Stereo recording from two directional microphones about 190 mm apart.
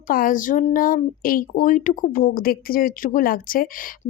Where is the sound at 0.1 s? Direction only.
45° left (ahead or behind).